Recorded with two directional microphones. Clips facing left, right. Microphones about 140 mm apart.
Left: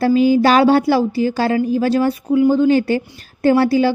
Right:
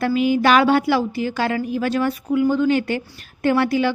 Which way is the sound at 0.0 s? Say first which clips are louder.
Left 5 dB; 35° left (ahead or behind).